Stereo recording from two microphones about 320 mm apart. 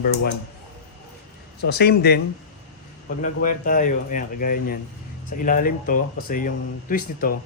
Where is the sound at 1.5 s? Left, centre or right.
Left.